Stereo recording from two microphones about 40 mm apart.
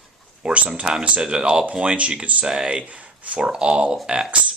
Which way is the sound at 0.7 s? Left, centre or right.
Right.